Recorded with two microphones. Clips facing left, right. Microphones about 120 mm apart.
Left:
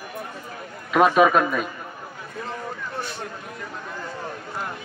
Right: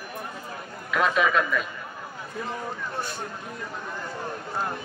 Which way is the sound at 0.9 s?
55° left (ahead or behind).